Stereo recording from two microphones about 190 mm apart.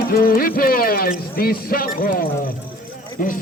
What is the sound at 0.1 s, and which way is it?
Bird, 50° left (ahead or behind).